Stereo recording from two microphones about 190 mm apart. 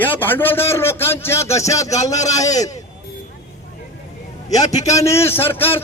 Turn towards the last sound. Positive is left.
turn(degrees=10)  # may be behind; listen again after turning